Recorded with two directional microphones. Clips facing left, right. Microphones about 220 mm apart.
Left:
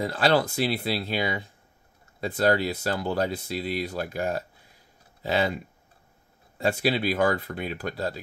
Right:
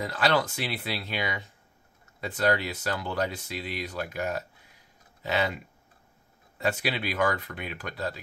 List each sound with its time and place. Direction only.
0.0 s speech: 30° left (ahead or behind)
6.6 s speech: 35° left (ahead or behind)